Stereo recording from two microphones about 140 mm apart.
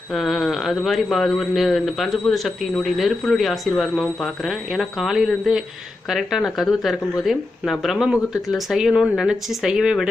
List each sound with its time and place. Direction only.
0.1 s speech: centre (ahead or behind)